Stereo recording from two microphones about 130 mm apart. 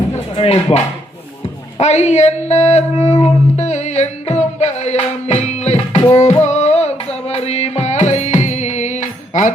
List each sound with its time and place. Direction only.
0.3 s speech: 55° left (ahead or behind)
1.8 s music: 60° left (ahead or behind)